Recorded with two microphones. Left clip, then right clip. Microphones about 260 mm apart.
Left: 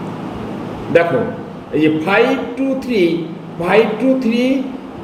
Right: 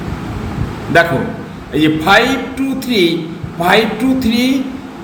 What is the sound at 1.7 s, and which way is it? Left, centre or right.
Speech, centre.